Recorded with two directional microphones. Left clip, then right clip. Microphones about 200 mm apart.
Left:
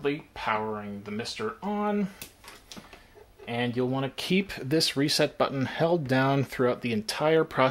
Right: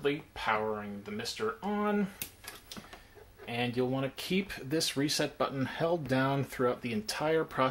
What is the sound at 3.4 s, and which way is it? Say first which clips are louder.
Speech: left 3 dB; 25° left (ahead or behind).